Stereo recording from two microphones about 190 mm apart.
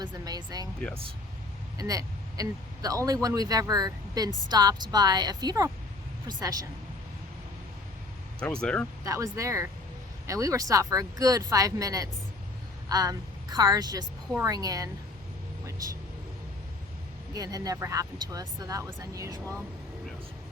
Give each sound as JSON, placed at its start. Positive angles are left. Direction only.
{"t": 0.0, "sound": "speech", "side_deg": -20}
{"t": 1.8, "sound": "speech", "side_deg": -20}
{"t": 8.6, "sound": "speech", "side_deg": 5}
{"t": 9.0, "sound": "speech", "side_deg": -15}
{"t": 15.6, "sound": "vehicle", "side_deg": -15}
{"t": 17.3, "sound": "speech", "side_deg": -20}